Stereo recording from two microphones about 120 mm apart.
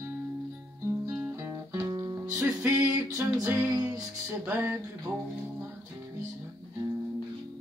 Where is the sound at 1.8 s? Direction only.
30° right (ahead or behind).